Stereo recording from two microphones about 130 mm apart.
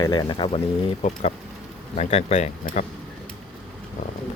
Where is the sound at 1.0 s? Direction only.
60° left (ahead or behind).